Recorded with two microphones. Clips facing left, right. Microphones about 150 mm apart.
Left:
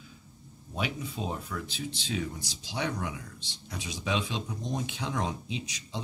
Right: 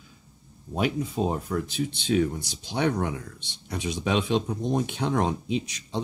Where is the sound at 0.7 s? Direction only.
45° right (ahead or behind).